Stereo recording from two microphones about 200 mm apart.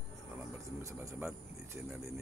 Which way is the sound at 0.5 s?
15° right (ahead or behind).